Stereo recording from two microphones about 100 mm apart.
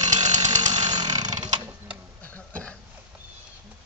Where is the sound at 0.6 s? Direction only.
45° right (ahead or behind).